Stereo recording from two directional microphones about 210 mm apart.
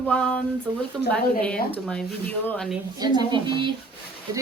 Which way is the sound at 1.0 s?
Centre (ahead or behind).